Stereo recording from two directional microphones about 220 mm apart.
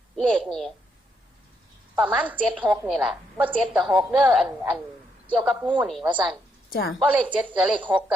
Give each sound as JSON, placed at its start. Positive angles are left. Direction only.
{"t": 0.2, "sound": "a woman's voice", "side_deg": 0}
{"t": 2.0, "sound": "a woman's voice", "side_deg": -5}
{"t": 6.7, "sound": "a woman's voice", "side_deg": 45}
{"t": 7.0, "sound": "speech", "side_deg": -5}